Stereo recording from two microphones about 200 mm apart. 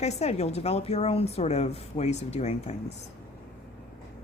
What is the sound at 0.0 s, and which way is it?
Speech, 35° left (ahead or behind).